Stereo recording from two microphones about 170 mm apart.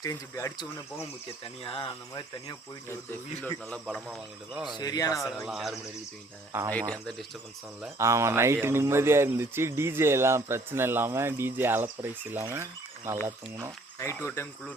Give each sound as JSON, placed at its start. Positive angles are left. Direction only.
{"t": 0.0, "sound": "speech", "side_deg": 20}
{"t": 1.6, "sound": "speech", "side_deg": 35}
{"t": 2.9, "sound": "speech", "side_deg": 10}
{"t": 4.8, "sound": "speech", "side_deg": 20}
{"t": 5.5, "sound": "speech", "side_deg": 0}
{"t": 6.5, "sound": "speech", "side_deg": -15}
{"t": 6.9, "sound": "speech", "side_deg": 0}
{"t": 7.9, "sound": "speech", "side_deg": -15}